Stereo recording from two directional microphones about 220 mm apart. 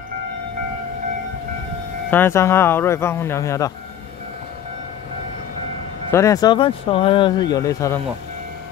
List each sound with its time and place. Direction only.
2.0 s speech: 10° left (ahead or behind)
6.1 s speech: 15° left (ahead or behind)